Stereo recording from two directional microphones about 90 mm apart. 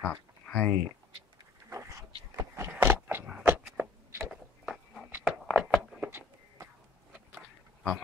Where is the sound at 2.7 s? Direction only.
25° right (ahead or behind).